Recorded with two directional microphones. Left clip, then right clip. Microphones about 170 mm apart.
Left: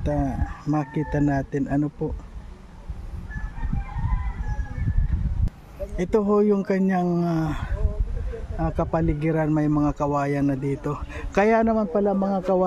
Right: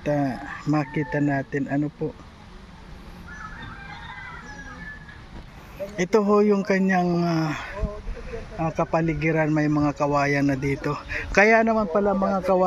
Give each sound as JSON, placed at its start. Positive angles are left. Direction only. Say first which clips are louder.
{"t": 0.0, "sound": "speech", "louder": "right 2 dB", "side_deg": 15}
{"t": 0.9, "sound": "a man's voice", "louder": "even", "side_deg": 30}
{"t": 5.9, "sound": "a man's voice", "louder": "right 1 dB", "side_deg": 15}